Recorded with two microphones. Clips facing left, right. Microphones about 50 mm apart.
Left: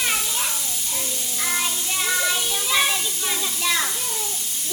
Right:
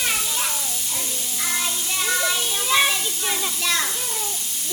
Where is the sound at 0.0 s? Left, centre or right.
Centre.